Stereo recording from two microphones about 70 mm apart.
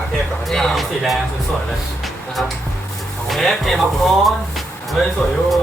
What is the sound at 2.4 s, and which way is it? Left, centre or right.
Speech, centre.